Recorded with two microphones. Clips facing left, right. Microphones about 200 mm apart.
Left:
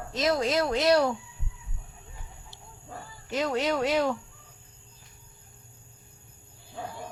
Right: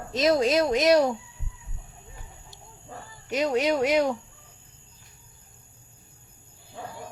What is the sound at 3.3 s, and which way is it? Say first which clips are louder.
Speech: right 3 dB; 15° right (ahead or behind).